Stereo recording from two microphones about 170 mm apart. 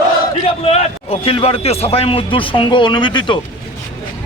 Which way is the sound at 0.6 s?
35° left (ahead or behind).